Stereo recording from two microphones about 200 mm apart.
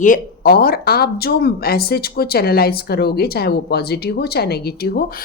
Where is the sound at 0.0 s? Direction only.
45° left (ahead or behind).